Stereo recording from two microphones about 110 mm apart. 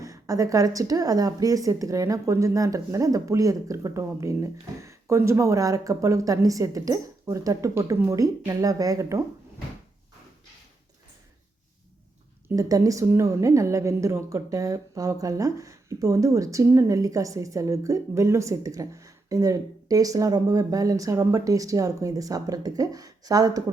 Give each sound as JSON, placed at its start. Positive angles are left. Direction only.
{"t": 0.0, "sound": "a woman's voice", "side_deg": -30}
{"t": 8.2, "sound": "a woman's voice", "side_deg": -30}
{"t": 12.5, "sound": "a woman's voice", "side_deg": -30}